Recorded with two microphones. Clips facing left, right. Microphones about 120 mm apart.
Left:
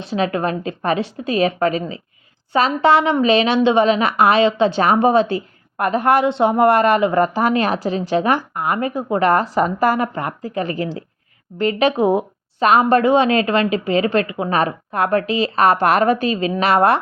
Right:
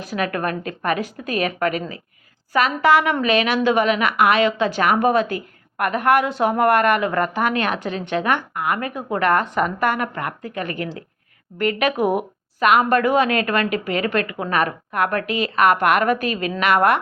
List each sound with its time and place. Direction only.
0.0 s a woman's voice: 25° left (ahead or behind)